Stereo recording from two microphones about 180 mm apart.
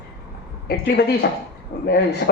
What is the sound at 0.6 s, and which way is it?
Speech, 60° left (ahead or behind).